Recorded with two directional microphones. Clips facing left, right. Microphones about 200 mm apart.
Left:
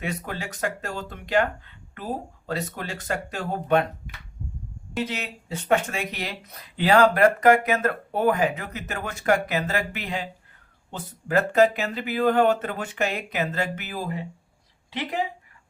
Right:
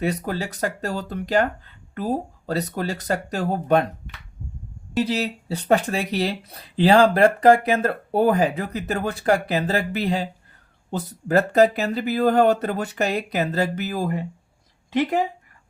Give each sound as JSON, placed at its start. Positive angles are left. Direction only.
{"t": 0.0, "sound": "speech", "side_deg": -35}
{"t": 4.9, "sound": "speech", "side_deg": -35}